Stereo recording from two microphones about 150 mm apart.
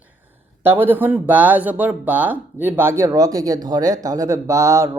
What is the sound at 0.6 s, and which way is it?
Speech, 15° right (ahead or behind).